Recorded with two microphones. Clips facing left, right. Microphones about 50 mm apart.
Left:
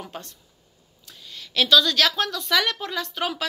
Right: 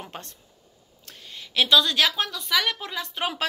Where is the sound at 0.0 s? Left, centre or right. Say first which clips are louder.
Left 2 dB; right.